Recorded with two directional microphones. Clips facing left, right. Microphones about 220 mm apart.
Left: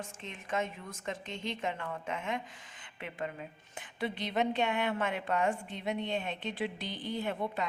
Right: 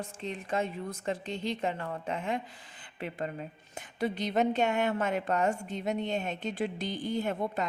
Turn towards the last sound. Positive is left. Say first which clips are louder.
# right 3 dB
turn(degrees=-45)  # may be behind; listen again after turning